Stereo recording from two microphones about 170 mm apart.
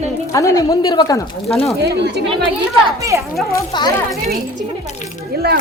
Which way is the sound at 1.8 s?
75° right (ahead or behind).